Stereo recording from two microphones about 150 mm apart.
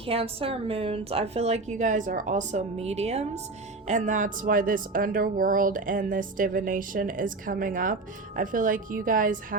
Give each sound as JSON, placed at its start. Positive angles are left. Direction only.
{"t": 0.0, "sound": "speech", "side_deg": -40}